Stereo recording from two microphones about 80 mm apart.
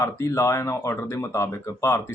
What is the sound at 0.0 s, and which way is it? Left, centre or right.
Speech, left.